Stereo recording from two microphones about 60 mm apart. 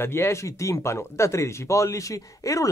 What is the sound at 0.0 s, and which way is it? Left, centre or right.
Speech, left.